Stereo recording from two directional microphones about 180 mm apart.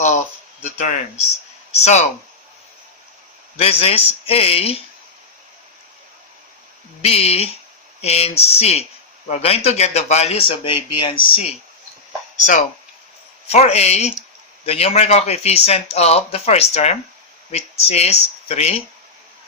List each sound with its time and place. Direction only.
0.8 s speech: 40° left (ahead or behind)
3.6 s speech: 30° left (ahead or behind)
7.0 s speech: 35° left (ahead or behind)
13.5 s speech: 35° left (ahead or behind)